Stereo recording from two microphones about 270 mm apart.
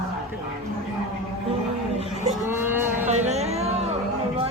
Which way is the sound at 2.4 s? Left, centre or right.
Centre.